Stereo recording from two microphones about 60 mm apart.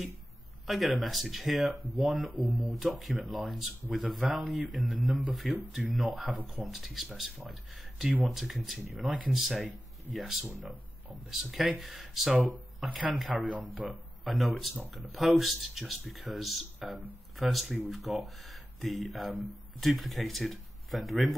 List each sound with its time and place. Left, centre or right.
0.7 s speech: centre
11.5 s speech: centre
13.3 s speech: right
13.7 s speech: centre